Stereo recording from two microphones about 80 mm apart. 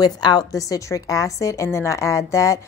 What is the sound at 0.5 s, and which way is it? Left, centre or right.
A woman's voice, left.